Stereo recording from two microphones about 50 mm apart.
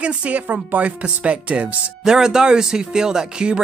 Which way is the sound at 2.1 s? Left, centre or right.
Centre.